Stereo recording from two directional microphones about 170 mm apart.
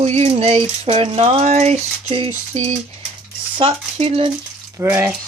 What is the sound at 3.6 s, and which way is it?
Speech, 35° right (ahead or behind).